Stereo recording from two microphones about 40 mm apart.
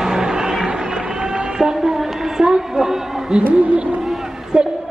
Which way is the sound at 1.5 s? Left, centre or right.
Centre.